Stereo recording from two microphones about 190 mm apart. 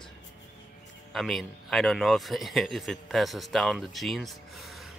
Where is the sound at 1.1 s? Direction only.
Centre (ahead or behind).